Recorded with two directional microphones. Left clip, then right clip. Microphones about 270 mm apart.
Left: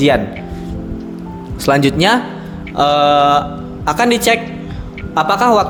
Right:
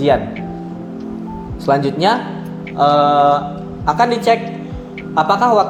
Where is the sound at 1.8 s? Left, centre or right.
Left.